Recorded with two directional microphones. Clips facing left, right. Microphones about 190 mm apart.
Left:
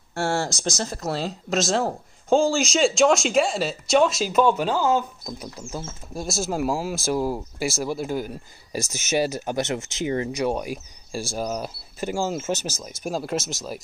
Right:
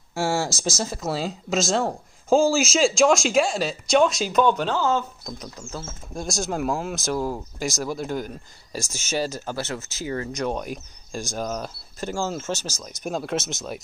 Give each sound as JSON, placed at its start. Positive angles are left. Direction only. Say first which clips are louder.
{"t": 0.1, "sound": "speech", "louder": "even", "side_deg": 0}
{"t": 10.4, "sound": "speech", "louder": "left 2 dB", "side_deg": 10}
{"t": 12.5, "sound": "speech", "louder": "left 3 dB", "side_deg": -10}
{"t": 13.0, "sound": "speech", "louder": "even", "side_deg": 0}